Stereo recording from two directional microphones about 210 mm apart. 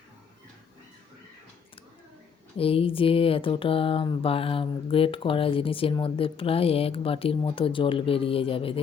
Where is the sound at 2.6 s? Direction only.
25° left (ahead or behind).